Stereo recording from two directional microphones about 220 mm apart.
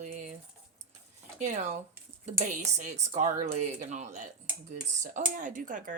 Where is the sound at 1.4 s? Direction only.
30° right (ahead or behind).